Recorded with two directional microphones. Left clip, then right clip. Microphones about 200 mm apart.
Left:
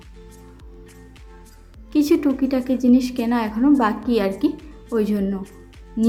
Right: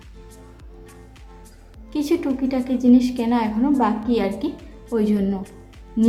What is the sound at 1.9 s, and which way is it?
A woman's voice, 20° left (ahead or behind).